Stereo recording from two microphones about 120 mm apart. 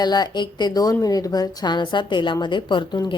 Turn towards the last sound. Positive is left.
turn(degrees=40)  # may be behind; listen again after turning